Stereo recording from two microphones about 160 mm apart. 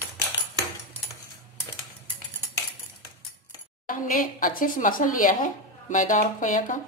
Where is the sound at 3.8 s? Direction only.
60° left (ahead or behind).